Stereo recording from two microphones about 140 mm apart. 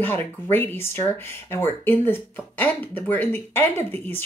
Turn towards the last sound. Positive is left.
turn(degrees=15)  # may be behind; listen again after turning